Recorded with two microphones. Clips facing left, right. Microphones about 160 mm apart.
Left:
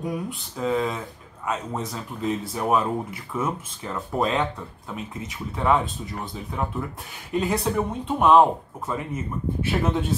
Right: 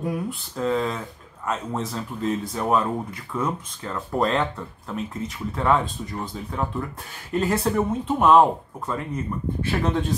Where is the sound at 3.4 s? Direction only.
20° left (ahead or behind).